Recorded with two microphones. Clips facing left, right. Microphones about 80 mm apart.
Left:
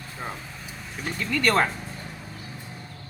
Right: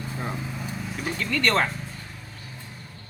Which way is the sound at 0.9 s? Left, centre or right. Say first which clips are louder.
Even; centre.